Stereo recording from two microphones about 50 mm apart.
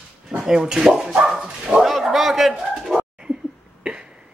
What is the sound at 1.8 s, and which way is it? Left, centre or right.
Bird, centre.